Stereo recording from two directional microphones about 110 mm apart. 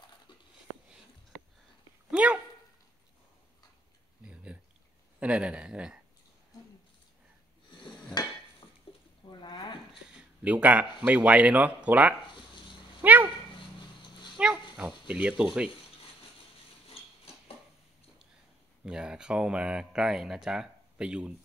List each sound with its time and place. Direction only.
2.0 s dog: 10° right (ahead or behind)
5.2 s a man's voice: 10° right (ahead or behind)
7.8 s dishes: 40° left (ahead or behind)
8.9 s a sound: 60° left (ahead or behind)
9.4 s a sound: 45° left (ahead or behind)
10.1 s a man's voice: 15° right (ahead or behind)
13.0 s dog: 15° right (ahead or behind)
14.3 s pig: 10° right (ahead or behind)
14.8 s a man's voice: 10° right (ahead or behind)
18.9 s speech: 5° right (ahead or behind)